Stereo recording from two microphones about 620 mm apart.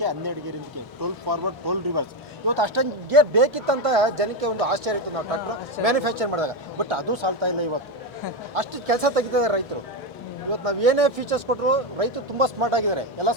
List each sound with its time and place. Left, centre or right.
0.0 s a man's voice: right
8.5 s speech: right